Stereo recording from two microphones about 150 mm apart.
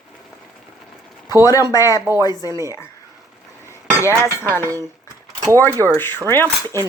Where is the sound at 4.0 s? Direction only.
20° left (ahead or behind).